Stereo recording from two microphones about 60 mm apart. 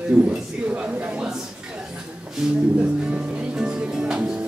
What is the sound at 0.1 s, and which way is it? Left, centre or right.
Speech, centre.